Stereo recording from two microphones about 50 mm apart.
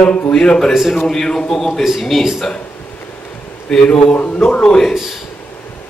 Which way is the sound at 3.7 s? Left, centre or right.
Centre.